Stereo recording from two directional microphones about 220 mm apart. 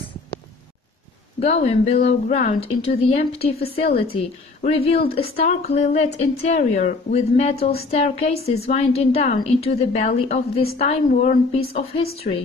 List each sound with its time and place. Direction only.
1.4 s speech: 30° left (ahead or behind)